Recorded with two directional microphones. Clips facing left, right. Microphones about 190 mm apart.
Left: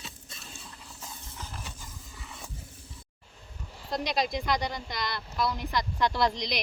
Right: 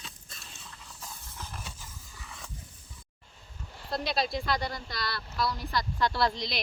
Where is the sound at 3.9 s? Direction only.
15° left (ahead or behind).